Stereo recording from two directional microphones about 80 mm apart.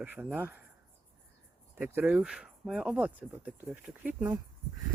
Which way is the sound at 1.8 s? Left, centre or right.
Right.